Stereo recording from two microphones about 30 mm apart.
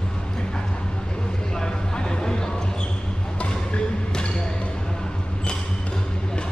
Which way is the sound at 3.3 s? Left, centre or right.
Left.